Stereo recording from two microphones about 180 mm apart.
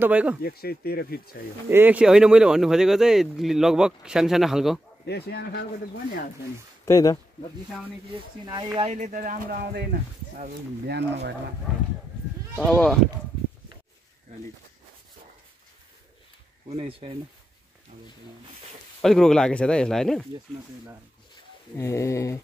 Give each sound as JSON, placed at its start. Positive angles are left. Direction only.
{"t": 0.0, "sound": "speech", "side_deg": -5}
{"t": 0.4, "sound": "speech", "side_deg": 60}
{"t": 1.7, "sound": "speech", "side_deg": -10}
{"t": 5.0, "sound": "speech", "side_deg": 65}
{"t": 6.9, "sound": "speech", "side_deg": 20}
{"t": 8.9, "sound": "speech", "side_deg": -45}
{"t": 10.9, "sound": "speech", "side_deg": -70}
{"t": 11.7, "sound": "speech", "side_deg": 0}
{"t": 16.6, "sound": "speech", "side_deg": -35}
{"t": 18.9, "sound": "speech", "side_deg": 0}
{"t": 21.7, "sound": "a sound", "side_deg": 15}